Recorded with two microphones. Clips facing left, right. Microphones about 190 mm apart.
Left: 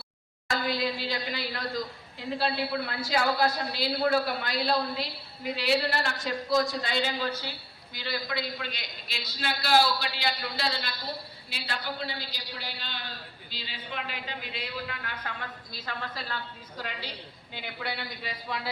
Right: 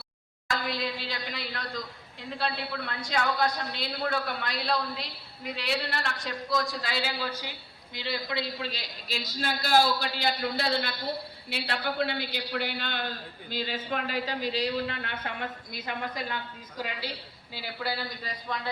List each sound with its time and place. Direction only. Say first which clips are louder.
0.5 s a woman's voice: left 3 dB; centre (ahead or behind)
7.9 s a man's voice: right 1 dB; 25° right (ahead or behind); by 18.7 s 5° left (ahead or behind)